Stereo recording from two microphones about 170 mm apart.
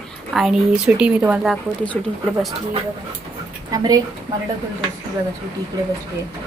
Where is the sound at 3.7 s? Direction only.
20° right (ahead or behind).